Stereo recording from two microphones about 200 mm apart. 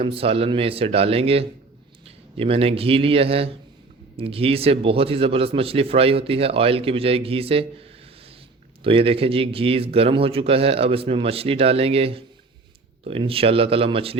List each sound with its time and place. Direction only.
0.0 s a man's voice: 30° right (ahead or behind)